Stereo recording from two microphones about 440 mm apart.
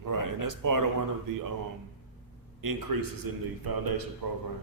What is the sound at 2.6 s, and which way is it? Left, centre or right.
A man's voice, right.